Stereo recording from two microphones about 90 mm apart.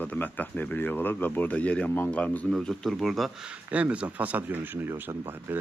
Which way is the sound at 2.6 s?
5° left (ahead or behind).